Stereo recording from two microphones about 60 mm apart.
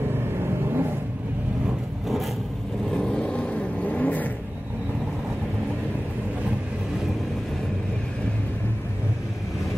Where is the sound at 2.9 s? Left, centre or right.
Centre.